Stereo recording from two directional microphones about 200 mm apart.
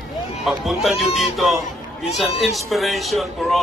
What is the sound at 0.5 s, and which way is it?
Speech, centre (ahead or behind).